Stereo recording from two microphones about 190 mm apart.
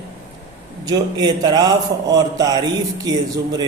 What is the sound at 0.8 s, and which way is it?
A man's voice, 20° right (ahead or behind).